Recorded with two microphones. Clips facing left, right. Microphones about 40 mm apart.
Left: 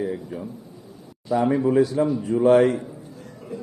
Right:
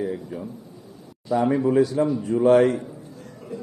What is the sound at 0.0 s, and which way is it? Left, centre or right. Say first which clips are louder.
A man's voice: even; centre.